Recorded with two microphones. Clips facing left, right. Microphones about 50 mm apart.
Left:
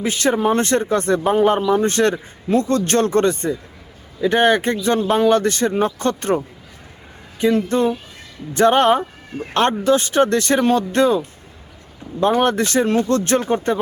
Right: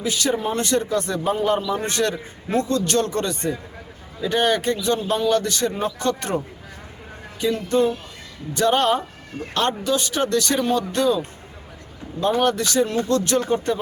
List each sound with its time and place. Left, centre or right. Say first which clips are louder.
0.0 s speech: left 5 dB; left
9.3 s speech: left 3 dB; centre
9.8 s speech: left 7 dB; left
12.2 s speech: left 3 dB; left